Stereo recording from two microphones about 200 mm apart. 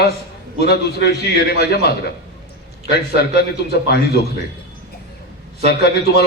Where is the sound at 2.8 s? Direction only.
50° left (ahead or behind).